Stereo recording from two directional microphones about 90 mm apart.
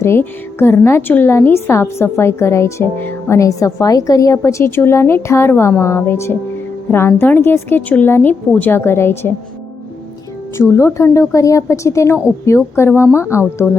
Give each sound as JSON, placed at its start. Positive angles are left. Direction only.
{"t": 0.0, "sound": "a woman's voice", "side_deg": 25}
{"t": 10.6, "sound": "a woman's voice", "side_deg": 30}